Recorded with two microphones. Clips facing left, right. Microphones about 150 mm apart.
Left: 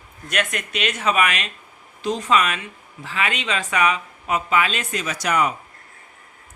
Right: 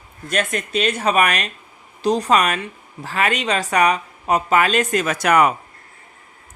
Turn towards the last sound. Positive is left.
turn(degrees=-60)  # may be behind; listen again after turning